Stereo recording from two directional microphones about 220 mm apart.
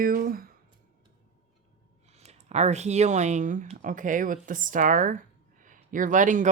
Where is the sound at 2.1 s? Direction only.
30° right (ahead or behind).